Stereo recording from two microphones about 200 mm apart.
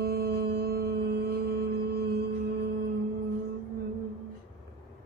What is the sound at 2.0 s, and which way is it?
Singing bowl, 50° right (ahead or behind).